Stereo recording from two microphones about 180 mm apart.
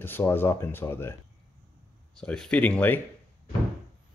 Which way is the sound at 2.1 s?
5° left (ahead or behind).